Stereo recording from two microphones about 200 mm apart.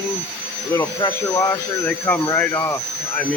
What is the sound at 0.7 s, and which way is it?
Speech, 15° left (ahead or behind).